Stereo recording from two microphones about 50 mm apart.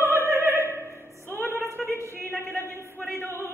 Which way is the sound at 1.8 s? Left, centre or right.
Centre.